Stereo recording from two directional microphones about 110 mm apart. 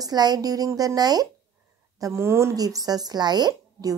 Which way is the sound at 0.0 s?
40° right (ahead or behind).